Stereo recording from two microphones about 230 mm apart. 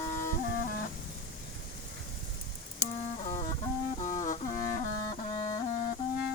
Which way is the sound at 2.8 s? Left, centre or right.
Left.